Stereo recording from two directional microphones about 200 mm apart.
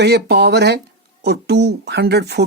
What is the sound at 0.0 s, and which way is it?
Speech, 55° right (ahead or behind).